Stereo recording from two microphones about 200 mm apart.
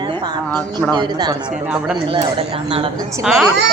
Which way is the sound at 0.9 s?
20° right (ahead or behind).